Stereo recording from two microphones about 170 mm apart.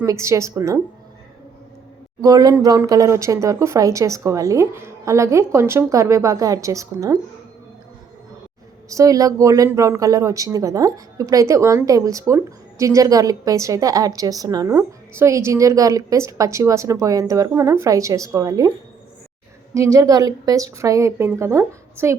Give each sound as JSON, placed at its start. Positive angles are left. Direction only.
{"t": 0.0, "sound": "speech", "side_deg": -20}
{"t": 2.2, "sound": "speech", "side_deg": -20}
{"t": 8.9, "sound": "a woman's voice", "side_deg": -20}
{"t": 19.7, "sound": "speech", "side_deg": -20}